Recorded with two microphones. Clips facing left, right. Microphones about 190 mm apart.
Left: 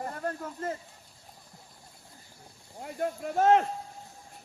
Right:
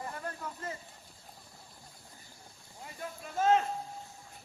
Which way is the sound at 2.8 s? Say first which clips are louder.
Left 11 dB; 60° left (ahead or behind).